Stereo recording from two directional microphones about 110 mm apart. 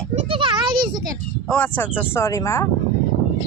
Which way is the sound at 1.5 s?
15° left (ahead or behind).